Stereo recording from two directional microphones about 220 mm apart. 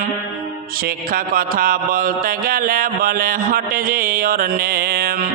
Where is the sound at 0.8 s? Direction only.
40° right (ahead or behind).